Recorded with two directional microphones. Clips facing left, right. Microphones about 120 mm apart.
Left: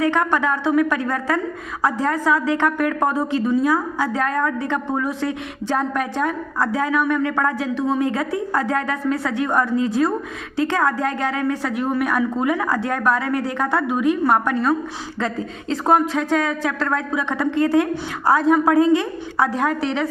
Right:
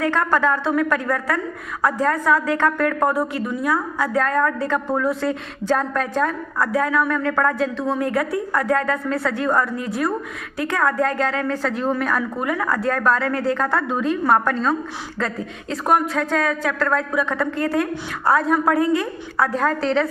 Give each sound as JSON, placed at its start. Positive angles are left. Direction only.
{"t": 0.1, "sound": "a woman's voice", "side_deg": 20}